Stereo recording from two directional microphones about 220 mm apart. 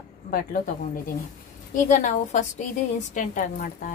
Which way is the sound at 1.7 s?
35° left (ahead or behind).